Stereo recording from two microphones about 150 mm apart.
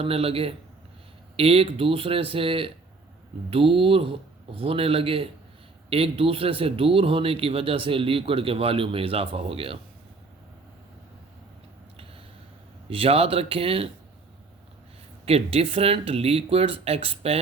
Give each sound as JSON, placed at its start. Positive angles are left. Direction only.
{"t": 0.0, "sound": "speech", "side_deg": -40}
{"t": 12.9, "sound": "speech", "side_deg": -40}
{"t": 15.3, "sound": "speech", "side_deg": -40}